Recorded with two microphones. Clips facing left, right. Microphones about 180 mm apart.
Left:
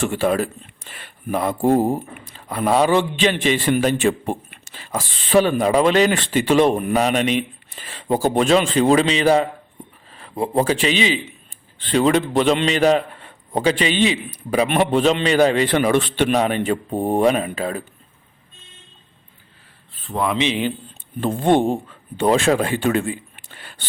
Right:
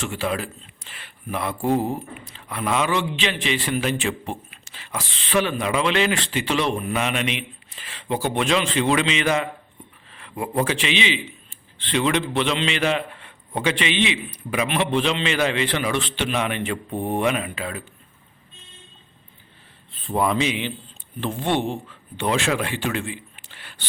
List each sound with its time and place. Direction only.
0.0 s a man's voice: 50° left (ahead or behind)
21.2 s speech: 45° left (ahead or behind)